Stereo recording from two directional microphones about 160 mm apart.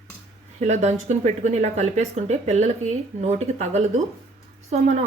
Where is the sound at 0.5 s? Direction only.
45° right (ahead or behind).